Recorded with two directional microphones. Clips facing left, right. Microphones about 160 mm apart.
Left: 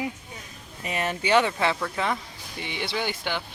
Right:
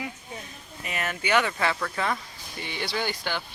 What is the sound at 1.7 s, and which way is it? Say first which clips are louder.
Speech: left 1 dB; 10° left (ahead or behind).